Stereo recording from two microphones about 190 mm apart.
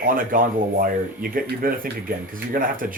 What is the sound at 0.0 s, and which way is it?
Speech, 45° right (ahead or behind).